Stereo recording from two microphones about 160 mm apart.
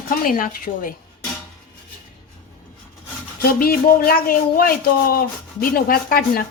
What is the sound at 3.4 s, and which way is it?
Speech, 70° left (ahead or behind).